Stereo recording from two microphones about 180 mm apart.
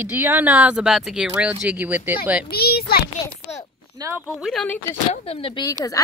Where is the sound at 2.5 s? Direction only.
60° left (ahead or behind).